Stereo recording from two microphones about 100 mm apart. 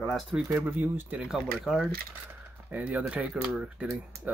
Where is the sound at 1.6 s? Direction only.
5° right (ahead or behind).